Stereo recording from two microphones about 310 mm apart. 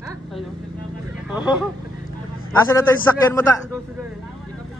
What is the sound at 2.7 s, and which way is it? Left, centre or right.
Speech, centre.